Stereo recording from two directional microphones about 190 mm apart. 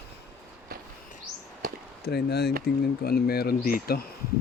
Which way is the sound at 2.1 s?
60° left (ahead or behind).